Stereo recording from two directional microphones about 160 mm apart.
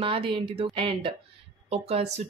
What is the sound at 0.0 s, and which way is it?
Speech, 35° right (ahead or behind).